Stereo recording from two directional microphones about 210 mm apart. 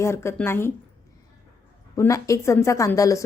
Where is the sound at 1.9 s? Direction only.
15° left (ahead or behind).